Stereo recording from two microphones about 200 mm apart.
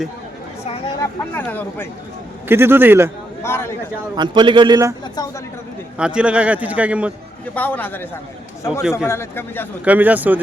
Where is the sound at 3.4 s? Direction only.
10° left (ahead or behind).